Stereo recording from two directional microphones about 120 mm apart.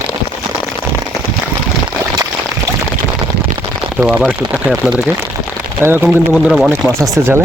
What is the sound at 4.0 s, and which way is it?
Speech, 5° right (ahead or behind).